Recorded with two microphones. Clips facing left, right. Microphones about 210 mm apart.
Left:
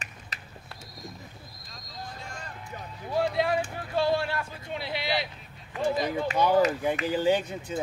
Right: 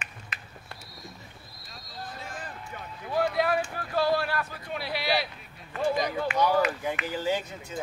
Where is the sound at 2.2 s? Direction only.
5° right (ahead or behind).